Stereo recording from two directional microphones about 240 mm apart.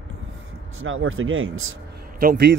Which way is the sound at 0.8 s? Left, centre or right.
Right.